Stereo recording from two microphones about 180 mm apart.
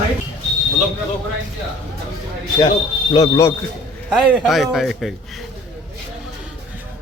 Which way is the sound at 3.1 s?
20° left (ahead or behind).